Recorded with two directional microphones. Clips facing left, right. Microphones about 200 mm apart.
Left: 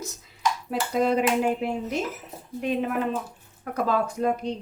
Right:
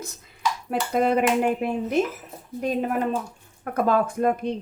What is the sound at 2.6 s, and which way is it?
Speech, 45° right (ahead or behind).